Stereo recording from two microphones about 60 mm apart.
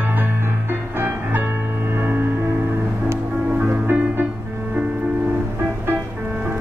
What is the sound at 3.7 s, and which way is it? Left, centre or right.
Music, right.